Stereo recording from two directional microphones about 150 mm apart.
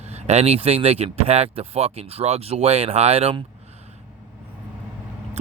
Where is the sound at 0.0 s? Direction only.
45° right (ahead or behind).